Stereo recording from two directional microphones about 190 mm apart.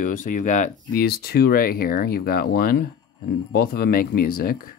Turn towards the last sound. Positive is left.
turn(degrees=50)  # may be behind; listen again after turning